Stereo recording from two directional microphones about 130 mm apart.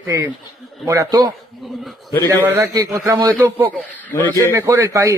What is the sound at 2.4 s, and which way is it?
A man's voice, 20° right (ahead or behind).